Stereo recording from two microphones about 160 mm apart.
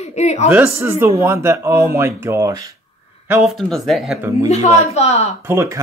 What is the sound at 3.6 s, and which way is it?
Speech, centre (ahead or behind).